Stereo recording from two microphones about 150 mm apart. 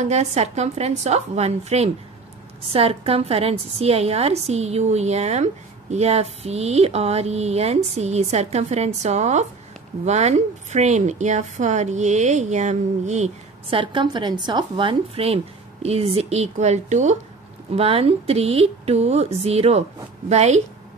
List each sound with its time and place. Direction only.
0.0 s a woman's voice: 50° right (ahead or behind)
13.7 s speech: 35° right (ahead or behind); by 17.2 s 50° right (ahead or behind)
17.7 s a woman's voice: 40° right (ahead or behind)